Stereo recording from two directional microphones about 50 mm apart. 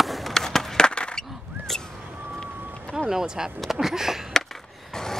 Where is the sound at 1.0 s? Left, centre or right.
Centre.